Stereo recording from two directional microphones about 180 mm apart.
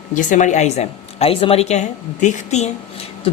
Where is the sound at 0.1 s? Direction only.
45° left (ahead or behind).